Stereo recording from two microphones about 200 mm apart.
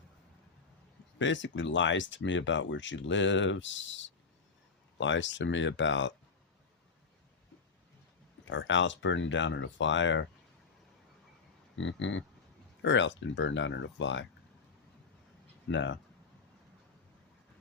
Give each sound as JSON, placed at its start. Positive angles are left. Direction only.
{"t": 1.2, "sound": "speech", "side_deg": 65}
{"t": 8.4, "sound": "speech", "side_deg": 70}
{"t": 11.8, "sound": "speech", "side_deg": 70}
{"t": 15.7, "sound": "speech", "side_deg": 65}